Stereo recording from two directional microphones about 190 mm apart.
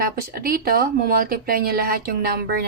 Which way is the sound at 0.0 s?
50° right (ahead or behind).